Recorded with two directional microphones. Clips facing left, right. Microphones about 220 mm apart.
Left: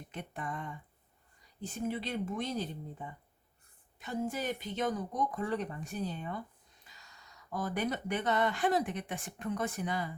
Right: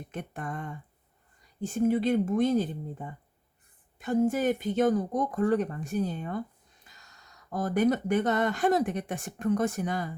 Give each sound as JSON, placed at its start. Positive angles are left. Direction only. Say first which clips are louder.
{"t": 0.1, "sound": "speech", "louder": "right 3 dB", "side_deg": -50}